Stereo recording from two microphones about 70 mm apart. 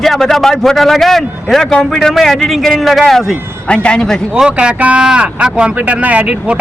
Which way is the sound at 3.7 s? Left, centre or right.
Centre.